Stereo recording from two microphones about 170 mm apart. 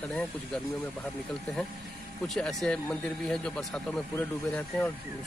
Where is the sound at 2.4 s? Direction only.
5° left (ahead or behind).